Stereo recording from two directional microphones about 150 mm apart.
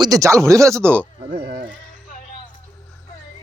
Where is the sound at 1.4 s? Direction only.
65° right (ahead or behind).